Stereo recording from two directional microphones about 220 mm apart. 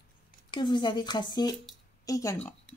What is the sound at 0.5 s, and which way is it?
Speech, 20° left (ahead or behind).